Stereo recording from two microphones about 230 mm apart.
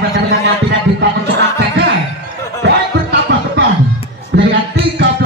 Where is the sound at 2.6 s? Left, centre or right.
Right.